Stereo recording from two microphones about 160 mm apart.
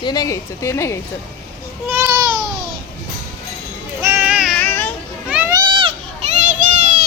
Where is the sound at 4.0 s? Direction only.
15° right (ahead or behind).